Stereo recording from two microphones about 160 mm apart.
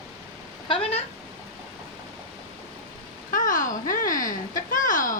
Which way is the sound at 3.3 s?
55° left (ahead or behind).